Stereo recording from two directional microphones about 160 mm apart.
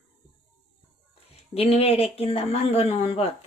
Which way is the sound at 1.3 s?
40° left (ahead or behind).